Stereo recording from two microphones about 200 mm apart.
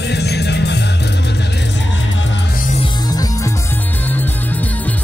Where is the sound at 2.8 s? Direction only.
15° left (ahead or behind).